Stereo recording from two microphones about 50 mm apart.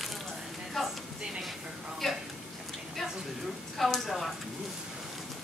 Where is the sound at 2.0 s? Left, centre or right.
Centre.